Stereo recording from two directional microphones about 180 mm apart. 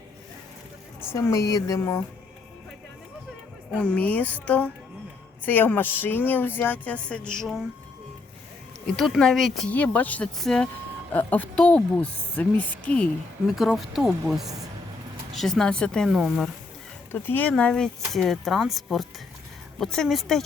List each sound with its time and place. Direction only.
1.1 s speech: 15° left (ahead or behind)
3.8 s speech: 5° left (ahead or behind)
9.0 s speech: centre (ahead or behind)
14.4 s a woman's voice: 20° right (ahead or behind)
15.4 s speech: centre (ahead or behind)
17.1 s speech: 10° left (ahead or behind)